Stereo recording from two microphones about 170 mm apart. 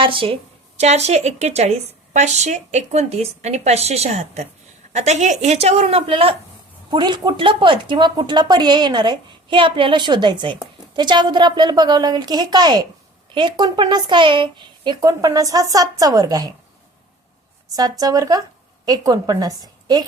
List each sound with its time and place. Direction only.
0.0 s a woman's voice: 30° right (ahead or behind)
17.7 s a woman's voice: 20° right (ahead or behind)